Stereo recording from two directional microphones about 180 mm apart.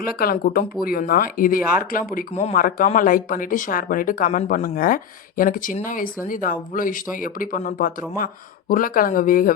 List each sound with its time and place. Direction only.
0.0 s speech: 55° left (ahead or behind)
2.3 s speech: 35° left (ahead or behind)
2.6 s speech: 50° left (ahead or behind)